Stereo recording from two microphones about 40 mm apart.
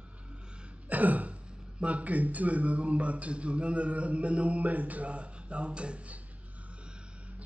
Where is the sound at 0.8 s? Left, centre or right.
Right.